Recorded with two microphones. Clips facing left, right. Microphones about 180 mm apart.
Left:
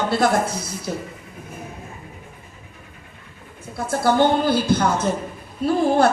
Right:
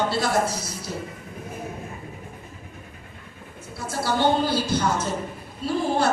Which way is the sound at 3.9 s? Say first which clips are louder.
Left 5 dB; 55° left (ahead or behind).